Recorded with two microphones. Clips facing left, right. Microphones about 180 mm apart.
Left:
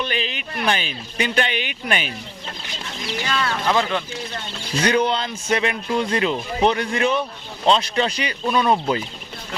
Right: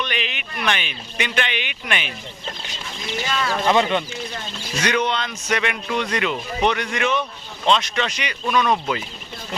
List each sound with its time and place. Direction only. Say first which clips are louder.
0.0 s speech: left 2 dB; 35° left (ahead or behind)
3.4 s speech: right 3 dB; centre (ahead or behind)
4.8 s speech: left 3 dB; 30° left (ahead or behind)